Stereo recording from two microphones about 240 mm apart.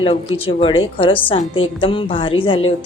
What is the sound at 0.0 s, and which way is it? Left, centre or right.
Speech, left.